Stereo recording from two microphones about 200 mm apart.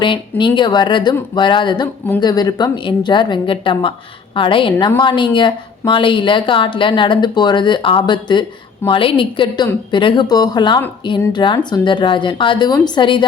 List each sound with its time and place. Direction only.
0.0 s a woman's voice: 25° left (ahead or behind)